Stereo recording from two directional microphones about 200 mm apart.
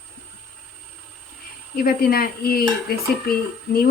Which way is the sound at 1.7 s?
50° left (ahead or behind).